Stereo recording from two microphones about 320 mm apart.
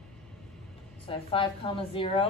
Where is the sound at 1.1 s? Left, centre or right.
Centre.